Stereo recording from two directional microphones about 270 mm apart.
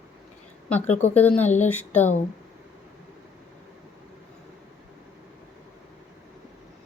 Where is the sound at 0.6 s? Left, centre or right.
Centre.